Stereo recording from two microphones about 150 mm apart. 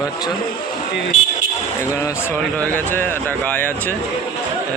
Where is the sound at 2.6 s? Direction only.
10° left (ahead or behind).